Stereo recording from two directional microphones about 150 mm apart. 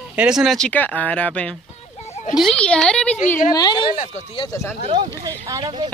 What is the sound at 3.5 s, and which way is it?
Speech, 25° left (ahead or behind).